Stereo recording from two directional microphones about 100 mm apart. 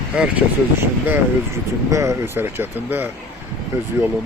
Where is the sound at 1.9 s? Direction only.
30° right (ahead or behind).